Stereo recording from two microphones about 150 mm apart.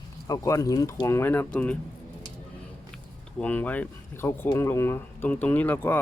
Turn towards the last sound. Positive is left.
turn(degrees=15)  # may be behind; listen again after turning